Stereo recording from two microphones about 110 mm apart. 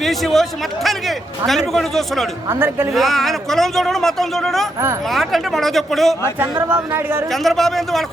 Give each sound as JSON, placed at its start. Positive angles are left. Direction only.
{"t": 0.0, "sound": "speech", "side_deg": 0}
{"t": 2.5, "sound": "a woman's voice", "side_deg": -20}
{"t": 2.9, "sound": "speech", "side_deg": 0}
{"t": 6.4, "sound": "a woman's voice", "side_deg": -20}
{"t": 7.3, "sound": "speech", "side_deg": 0}